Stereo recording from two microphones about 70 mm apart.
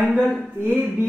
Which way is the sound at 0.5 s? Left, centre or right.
Right.